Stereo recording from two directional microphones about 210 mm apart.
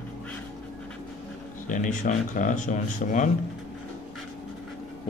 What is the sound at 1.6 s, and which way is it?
A man's voice, 35° left (ahead or behind).